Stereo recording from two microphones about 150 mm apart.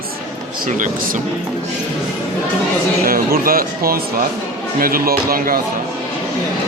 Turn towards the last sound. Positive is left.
turn(degrees=-75)  # may be behind; listen again after turning